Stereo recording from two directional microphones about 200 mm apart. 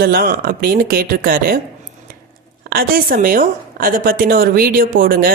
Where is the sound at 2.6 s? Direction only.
45° right (ahead or behind).